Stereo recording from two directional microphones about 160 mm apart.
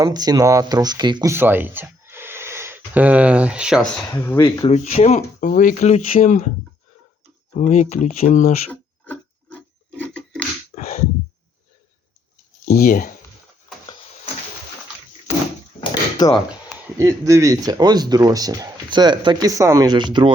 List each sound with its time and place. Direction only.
0.0 s speech: 25° right (ahead or behind)
1.3 s speech: 15° right (ahead or behind)
4.1 s speech: 15° left (ahead or behind)
4.6 s speech: 45° left (ahead or behind)
5.4 s speech: 60° left (ahead or behind)
7.5 s speech: 50° left (ahead or behind)
8.7 s rub: 10° left (ahead or behind)
10.8 s a sound: 45° left (ahead or behind)
12.6 s speech: 65° left (ahead or behind)
15.8 s a sound: 25° left (ahead or behind)
17.0 s speech: 20° right (ahead or behind)